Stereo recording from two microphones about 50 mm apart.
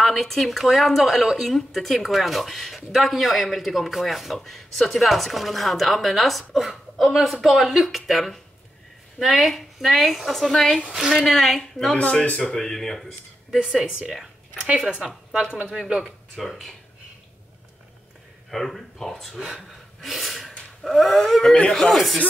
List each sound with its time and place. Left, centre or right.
0.0 s speech: centre
10.9 s speech: centre
11.1 s speech: centre
11.9 s speech: left
13.5 s speech: centre
14.6 s speech: centre
16.0 s speech: centre
18.5 s speech: centre
19.5 s gasp: centre
20.8 s speech: centre